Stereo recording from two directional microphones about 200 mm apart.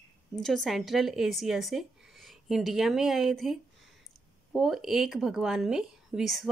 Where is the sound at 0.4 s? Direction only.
Centre (ahead or behind).